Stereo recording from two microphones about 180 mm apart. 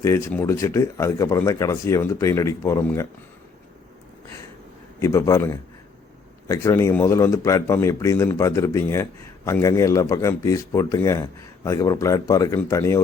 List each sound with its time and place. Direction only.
0.0 s speech: 15° left (ahead or behind)
4.9 s speech: 15° left (ahead or behind)